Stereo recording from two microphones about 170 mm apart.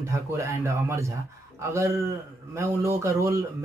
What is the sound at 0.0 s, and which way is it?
A man's voice, 15° right (ahead or behind).